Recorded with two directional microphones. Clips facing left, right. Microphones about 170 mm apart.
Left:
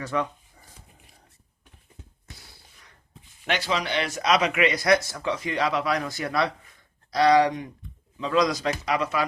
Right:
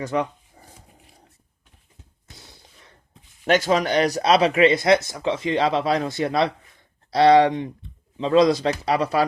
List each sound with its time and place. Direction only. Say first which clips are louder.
0.0 s speech: right 4 dB; 15° right (ahead or behind)
2.4 s a sound: right 4 dB; 20° right (ahead or behind)
3.4 s speech: right 8 dB; 45° right (ahead or behind)